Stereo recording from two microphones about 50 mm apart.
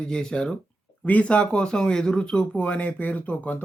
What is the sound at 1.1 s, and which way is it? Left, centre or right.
Speech, left.